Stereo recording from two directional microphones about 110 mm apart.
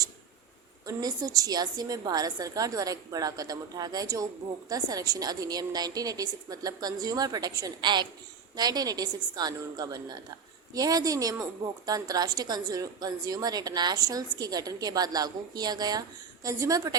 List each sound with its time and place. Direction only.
0.9 s a woman's voice: 35° right (ahead or behind)